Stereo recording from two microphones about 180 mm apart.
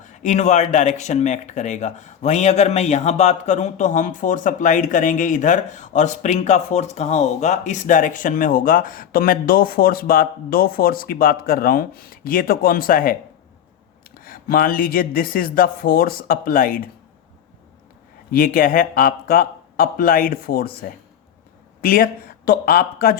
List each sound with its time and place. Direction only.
0.0 s speech: 45° left (ahead or behind)
14.2 s speech: 55° left (ahead or behind)
18.3 s speech: 55° left (ahead or behind)